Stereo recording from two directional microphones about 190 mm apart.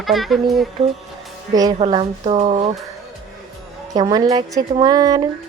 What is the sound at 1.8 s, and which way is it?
Speech, 30° right (ahead or behind).